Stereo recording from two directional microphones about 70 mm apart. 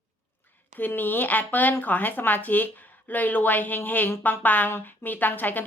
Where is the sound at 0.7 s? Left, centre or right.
Left.